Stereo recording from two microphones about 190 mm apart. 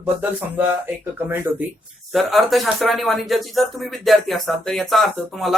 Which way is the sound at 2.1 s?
Centre (ahead or behind).